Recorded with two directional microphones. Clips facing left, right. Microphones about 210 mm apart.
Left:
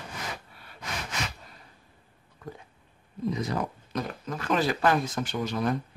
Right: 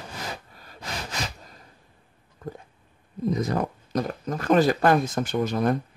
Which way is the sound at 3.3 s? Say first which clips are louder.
Right 6 dB; 45° right (ahead or behind).